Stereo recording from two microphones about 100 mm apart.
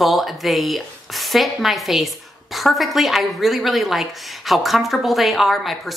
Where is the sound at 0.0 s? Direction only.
Centre (ahead or behind).